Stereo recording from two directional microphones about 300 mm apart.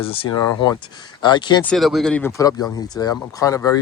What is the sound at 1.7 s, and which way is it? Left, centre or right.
Speech, centre.